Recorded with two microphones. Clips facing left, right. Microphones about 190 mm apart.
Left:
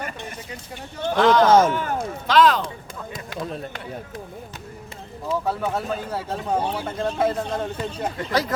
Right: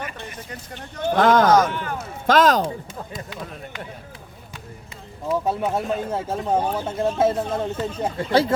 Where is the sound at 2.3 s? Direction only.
45° right (ahead or behind).